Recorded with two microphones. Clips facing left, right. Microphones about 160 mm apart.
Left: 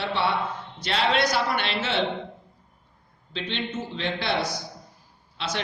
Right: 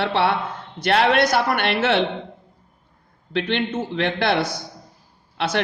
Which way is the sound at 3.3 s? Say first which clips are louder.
Right 8 dB; 65° right (ahead or behind).